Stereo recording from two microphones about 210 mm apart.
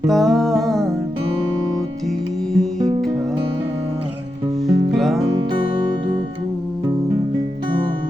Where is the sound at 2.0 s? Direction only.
Centre (ahead or behind).